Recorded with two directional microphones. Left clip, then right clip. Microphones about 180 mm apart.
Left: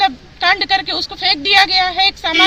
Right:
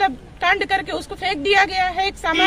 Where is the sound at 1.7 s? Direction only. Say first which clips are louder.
Left 6 dB; 35° right (ahead or behind).